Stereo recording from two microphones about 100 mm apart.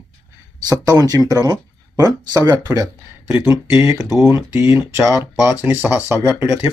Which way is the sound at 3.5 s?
30° right (ahead or behind).